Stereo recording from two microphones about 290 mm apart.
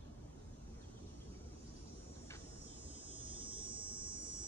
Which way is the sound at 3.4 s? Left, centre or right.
Centre.